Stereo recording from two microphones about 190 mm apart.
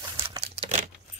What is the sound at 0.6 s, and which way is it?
Computer keyboard, 35° right (ahead or behind).